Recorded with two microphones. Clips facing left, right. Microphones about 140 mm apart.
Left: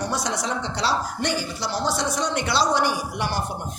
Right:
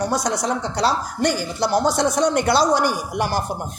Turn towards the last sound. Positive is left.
turn(degrees=-45)  # may be behind; listen again after turning